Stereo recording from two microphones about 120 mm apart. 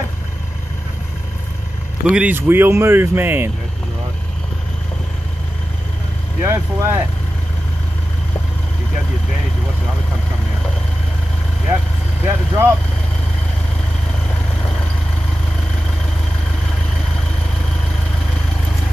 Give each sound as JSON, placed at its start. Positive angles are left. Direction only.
{"t": 2.0, "sound": "speech", "side_deg": -5}
{"t": 2.3, "sound": "speech", "side_deg": -20}
{"t": 6.4, "sound": "speech", "side_deg": -25}
{"t": 12.3, "sound": "speech", "side_deg": -25}